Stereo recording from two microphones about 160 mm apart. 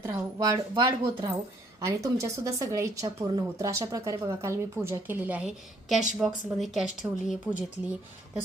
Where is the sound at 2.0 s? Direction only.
20° right (ahead or behind); by 6.8 s centre (ahead or behind).